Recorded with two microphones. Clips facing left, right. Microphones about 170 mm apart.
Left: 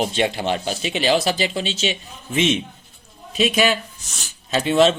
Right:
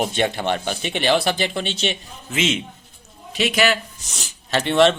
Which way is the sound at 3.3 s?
75° right (ahead or behind).